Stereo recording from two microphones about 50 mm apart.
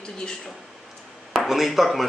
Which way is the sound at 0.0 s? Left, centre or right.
Centre.